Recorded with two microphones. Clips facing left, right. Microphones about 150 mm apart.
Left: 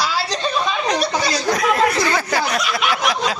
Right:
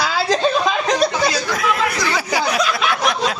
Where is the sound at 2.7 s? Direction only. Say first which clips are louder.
Right 1 dB; centre (ahead or behind).